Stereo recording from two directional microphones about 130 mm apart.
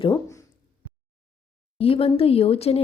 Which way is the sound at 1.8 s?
45° left (ahead or behind).